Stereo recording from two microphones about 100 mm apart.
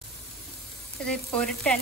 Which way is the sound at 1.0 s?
10° left (ahead or behind).